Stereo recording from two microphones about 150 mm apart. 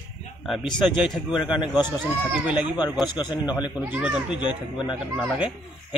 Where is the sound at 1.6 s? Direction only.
30° left (ahead or behind).